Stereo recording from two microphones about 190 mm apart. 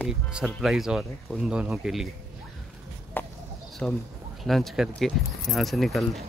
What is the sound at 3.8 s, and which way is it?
Speech, 5° left (ahead or behind).